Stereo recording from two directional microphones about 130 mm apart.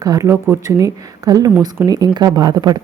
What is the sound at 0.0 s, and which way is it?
A woman's voice, 30° right (ahead or behind).